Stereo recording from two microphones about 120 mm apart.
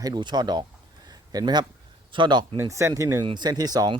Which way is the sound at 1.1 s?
35° right (ahead or behind).